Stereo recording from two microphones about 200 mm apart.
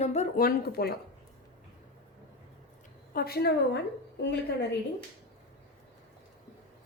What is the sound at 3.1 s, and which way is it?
A woman's voice, 50° left (ahead or behind).